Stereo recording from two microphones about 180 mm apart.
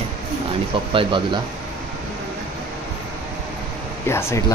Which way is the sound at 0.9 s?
30° right (ahead or behind).